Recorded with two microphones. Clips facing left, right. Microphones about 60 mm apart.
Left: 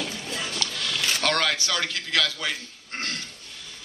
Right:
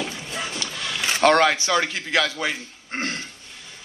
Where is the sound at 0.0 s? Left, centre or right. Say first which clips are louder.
Right 2 dB; right.